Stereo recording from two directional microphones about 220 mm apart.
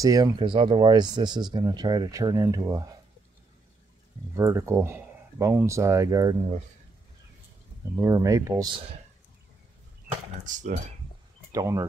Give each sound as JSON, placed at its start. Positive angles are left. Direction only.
{"t": 0.0, "sound": "speech", "side_deg": -15}
{"t": 4.4, "sound": "speech", "side_deg": -10}
{"t": 7.9, "sound": "speech", "side_deg": -15}
{"t": 10.4, "sound": "speech", "side_deg": -35}
{"t": 11.5, "sound": "speech", "side_deg": -15}